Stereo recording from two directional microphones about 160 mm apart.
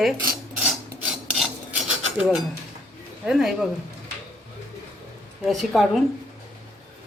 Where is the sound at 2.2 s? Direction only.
5° right (ahead or behind).